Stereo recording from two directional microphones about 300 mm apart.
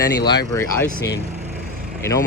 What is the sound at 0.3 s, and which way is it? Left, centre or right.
Speech, centre.